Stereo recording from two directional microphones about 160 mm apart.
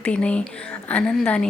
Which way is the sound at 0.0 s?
5° left (ahead or behind).